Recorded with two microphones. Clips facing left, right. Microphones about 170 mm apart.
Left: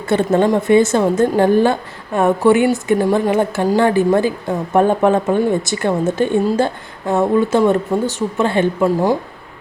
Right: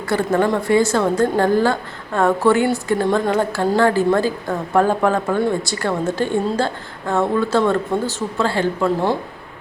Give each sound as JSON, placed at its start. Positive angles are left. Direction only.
{"t": 0.1, "sound": "a woman's voice", "side_deg": 25}